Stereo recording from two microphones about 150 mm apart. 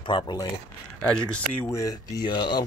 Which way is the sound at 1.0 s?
15° left (ahead or behind).